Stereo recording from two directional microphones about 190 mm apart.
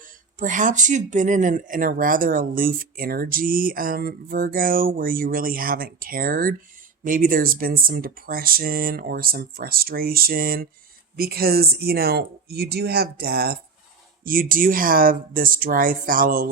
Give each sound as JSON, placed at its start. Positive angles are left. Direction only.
{"t": 0.3, "sound": "speech", "side_deg": -40}